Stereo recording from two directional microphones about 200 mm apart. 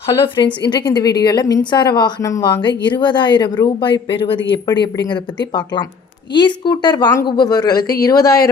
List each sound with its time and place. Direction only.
0.1 s a woman's voice: 20° left (ahead or behind)
6.3 s a woman's voice: 20° left (ahead or behind)